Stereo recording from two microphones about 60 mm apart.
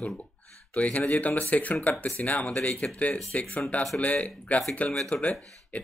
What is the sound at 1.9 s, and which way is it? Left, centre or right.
Speech, centre.